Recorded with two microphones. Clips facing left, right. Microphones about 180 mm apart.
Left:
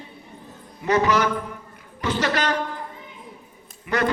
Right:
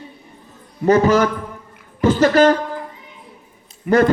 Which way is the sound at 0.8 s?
40° right (ahead or behind).